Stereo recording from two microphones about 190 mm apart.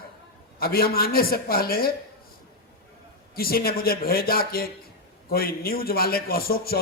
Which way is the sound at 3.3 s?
50° left (ahead or behind).